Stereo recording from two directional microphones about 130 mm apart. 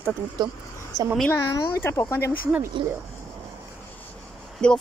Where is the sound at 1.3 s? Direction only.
30° left (ahead or behind).